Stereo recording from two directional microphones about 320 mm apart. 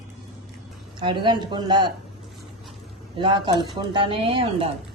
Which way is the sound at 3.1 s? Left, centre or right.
Centre.